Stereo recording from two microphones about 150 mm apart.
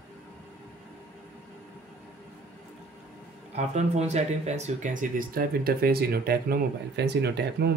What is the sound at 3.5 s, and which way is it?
Speech, 50° right (ahead or behind).